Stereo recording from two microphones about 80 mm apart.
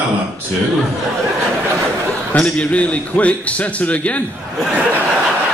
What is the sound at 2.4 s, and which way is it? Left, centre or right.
Speech, centre.